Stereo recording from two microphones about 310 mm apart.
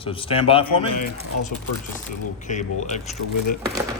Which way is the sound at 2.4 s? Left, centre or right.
Left.